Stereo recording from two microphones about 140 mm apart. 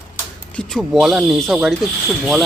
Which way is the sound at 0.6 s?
5° left (ahead or behind).